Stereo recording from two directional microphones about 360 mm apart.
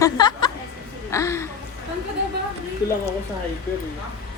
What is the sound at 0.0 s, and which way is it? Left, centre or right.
Music, centre.